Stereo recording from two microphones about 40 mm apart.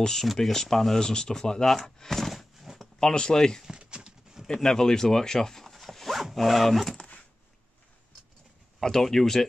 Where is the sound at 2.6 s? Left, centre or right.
Centre.